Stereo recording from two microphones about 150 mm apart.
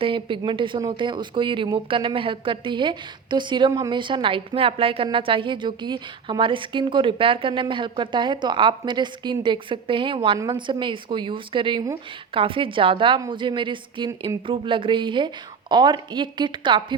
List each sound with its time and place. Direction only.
0.0 s a woman's voice: 35° right (ahead or behind)